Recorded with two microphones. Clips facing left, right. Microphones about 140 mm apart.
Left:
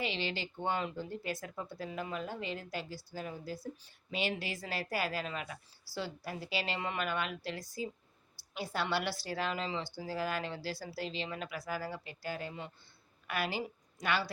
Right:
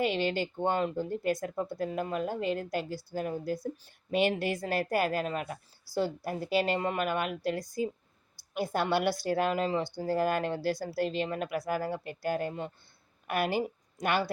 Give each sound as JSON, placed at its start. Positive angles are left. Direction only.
{"t": 0.0, "sound": "a woman's voice", "side_deg": -50}